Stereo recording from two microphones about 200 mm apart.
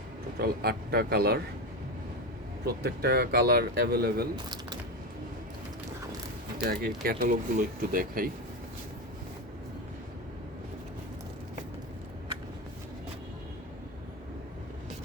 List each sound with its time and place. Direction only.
0.3 s speech: 50° right (ahead or behind)
2.6 s speech: 50° right (ahead or behind)
4.4 s a sound: 20° right (ahead or behind)
6.7 s speech: 50° right (ahead or behind)